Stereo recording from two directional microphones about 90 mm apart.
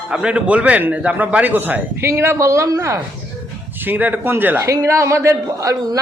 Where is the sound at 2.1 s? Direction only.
30° right (ahead or behind).